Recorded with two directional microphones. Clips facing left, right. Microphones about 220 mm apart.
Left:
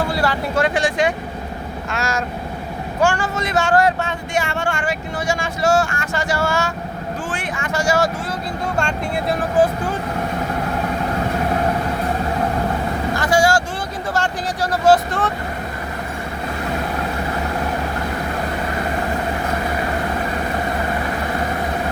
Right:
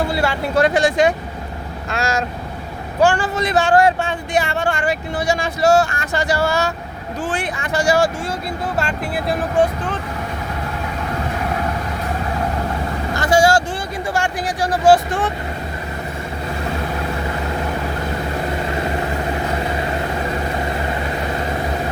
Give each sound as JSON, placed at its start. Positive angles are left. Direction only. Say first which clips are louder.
{"t": 0.1, "sound": "speech", "louder": "even", "side_deg": -25}
{"t": 0.6, "sound": "speech", "louder": "right 4 dB", "side_deg": -40}
{"t": 3.0, "sound": "speech", "louder": "right 3 dB", "side_deg": -35}
{"t": 8.7, "sound": "speech", "louder": "left 1 dB", "side_deg": -5}
{"t": 13.3, "sound": "speech", "louder": "right 2 dB", "side_deg": -25}
{"t": 14.1, "sound": "speech", "louder": "right 1 dB", "side_deg": -15}